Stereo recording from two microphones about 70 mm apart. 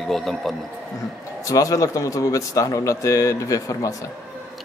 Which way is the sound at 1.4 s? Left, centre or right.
Left.